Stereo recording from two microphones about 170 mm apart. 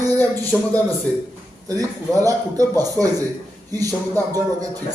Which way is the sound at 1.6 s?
20° right (ahead or behind).